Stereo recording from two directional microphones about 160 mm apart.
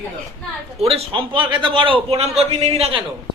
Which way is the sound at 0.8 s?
35° right (ahead or behind).